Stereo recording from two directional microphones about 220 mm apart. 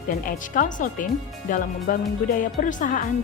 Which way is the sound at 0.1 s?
40° left (ahead or behind).